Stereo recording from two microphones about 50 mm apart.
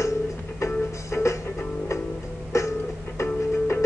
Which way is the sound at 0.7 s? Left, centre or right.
Left.